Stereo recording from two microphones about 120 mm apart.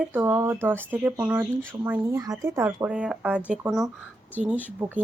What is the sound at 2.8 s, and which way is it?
Speech, 10° right (ahead or behind).